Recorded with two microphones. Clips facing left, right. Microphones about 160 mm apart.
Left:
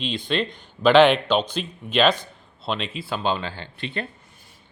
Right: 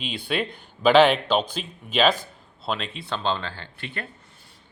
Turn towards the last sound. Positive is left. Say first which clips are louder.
# left 5 dB
turn(degrees=20)  # may be behind; listen again after turning